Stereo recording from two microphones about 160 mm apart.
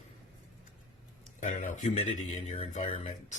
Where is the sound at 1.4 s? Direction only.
55° left (ahead or behind).